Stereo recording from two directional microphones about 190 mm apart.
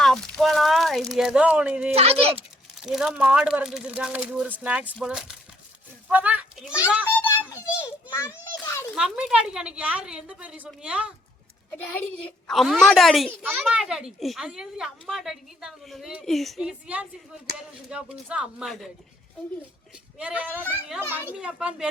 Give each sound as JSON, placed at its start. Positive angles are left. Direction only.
{"t": 0.0, "sound": "speech", "side_deg": 0}
{"t": 2.0, "sound": "a child's voice", "side_deg": -30}
{"t": 2.8, "sound": "a child's voice", "side_deg": 0}
{"t": 7.1, "sound": "children playing", "side_deg": 10}
{"t": 9.0, "sound": "a child's voice", "side_deg": -5}
{"t": 11.8, "sound": "a child's voice", "side_deg": 10}
{"t": 20.1, "sound": "a child's voice", "side_deg": -5}